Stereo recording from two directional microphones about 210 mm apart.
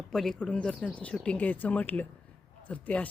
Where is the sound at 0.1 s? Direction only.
Centre (ahead or behind).